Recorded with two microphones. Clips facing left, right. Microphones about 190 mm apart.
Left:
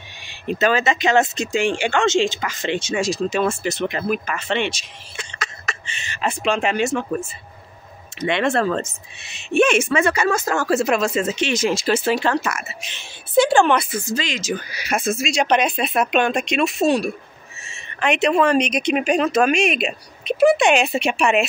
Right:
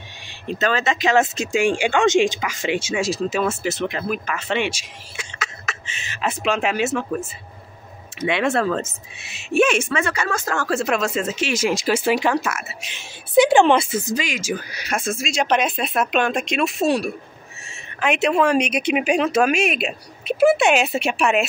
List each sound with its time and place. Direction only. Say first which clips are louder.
0.5 s speech: left 3 dB; 10° left (ahead or behind)
8.2 s speech: left 1 dB; 5° right (ahead or behind)
9.8 s speech: left 4 dB; 15° left (ahead or behind); by 13.0 s 5° right (ahead or behind)
13.4 s a woman's voice: right 2 dB; 20° right (ahead or behind)
14.7 s speech: left 3 dB; 5° left (ahead or behind)